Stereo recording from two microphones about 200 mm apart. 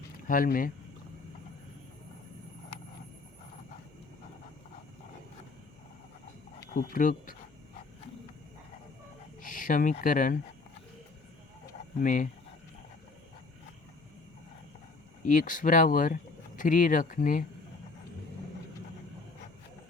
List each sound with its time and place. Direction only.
0.3 s speech: 45° left (ahead or behind)
6.7 s speech: 45° left (ahead or behind)
9.4 s speech: 45° left (ahead or behind)
11.9 s speech: 40° left (ahead or behind)
15.2 s speech: 40° left (ahead or behind)